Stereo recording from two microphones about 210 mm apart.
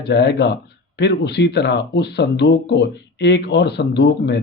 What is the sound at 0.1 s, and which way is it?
Speech, 55° left (ahead or behind).